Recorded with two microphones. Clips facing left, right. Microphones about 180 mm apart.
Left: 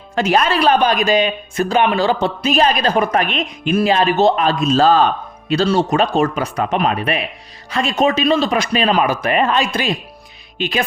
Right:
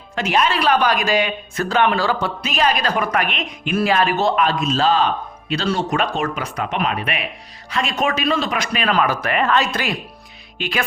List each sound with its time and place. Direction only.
0.2 s speech: 40° left (ahead or behind); by 2.3 s 20° left (ahead or behind)
2.4 s speech: 35° left (ahead or behind)
3.8 s speech: 20° left (ahead or behind)